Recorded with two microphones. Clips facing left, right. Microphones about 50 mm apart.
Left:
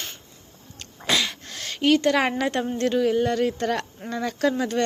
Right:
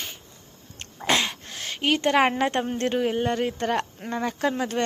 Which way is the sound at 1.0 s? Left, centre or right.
Right.